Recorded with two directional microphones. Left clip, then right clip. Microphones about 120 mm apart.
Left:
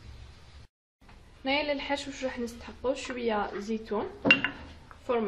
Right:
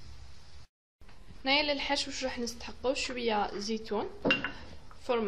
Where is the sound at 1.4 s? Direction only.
20° right (ahead or behind).